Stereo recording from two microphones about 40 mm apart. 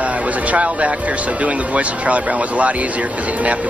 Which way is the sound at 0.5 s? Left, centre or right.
Right.